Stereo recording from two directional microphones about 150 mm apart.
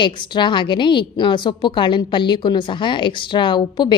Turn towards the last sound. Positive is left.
turn(degrees=30)  # may be behind; listen again after turning